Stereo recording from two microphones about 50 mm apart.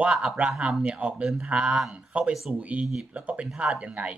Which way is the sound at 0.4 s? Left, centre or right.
Right.